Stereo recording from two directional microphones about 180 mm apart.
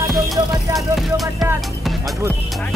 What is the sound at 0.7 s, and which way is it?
Speech, centre (ahead or behind).